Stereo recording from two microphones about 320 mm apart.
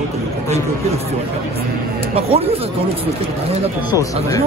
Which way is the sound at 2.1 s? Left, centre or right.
Centre.